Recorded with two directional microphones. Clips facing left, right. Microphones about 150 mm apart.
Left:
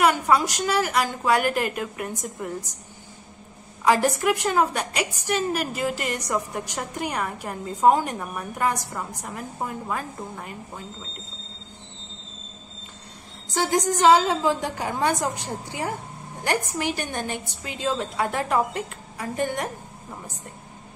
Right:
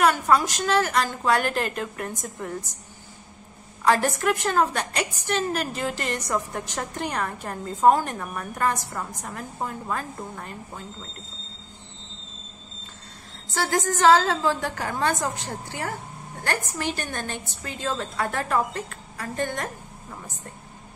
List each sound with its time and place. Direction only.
0.0 s a woman's voice: 15° left (ahead or behind)
3.8 s a woman's voice: 10° left (ahead or behind)
13.5 s a woman's voice: 15° left (ahead or behind)